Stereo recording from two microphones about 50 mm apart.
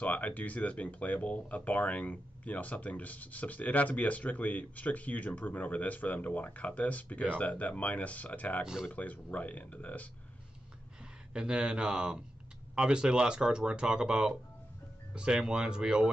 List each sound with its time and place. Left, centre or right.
0.0 s speech: left
8.6 s speech: centre
8.9 s speech: left
11.3 s speech: centre